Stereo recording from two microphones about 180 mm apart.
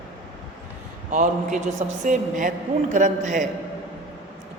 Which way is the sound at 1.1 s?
45° right (ahead or behind).